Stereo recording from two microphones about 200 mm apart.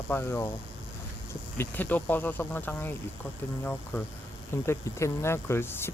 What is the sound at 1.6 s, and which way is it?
Speech, 10° left (ahead or behind).